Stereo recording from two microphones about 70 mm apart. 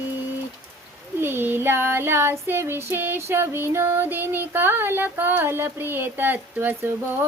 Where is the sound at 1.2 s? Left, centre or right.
Right.